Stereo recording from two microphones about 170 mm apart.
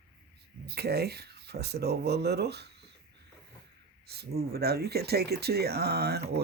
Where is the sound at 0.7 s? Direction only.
70° right (ahead or behind).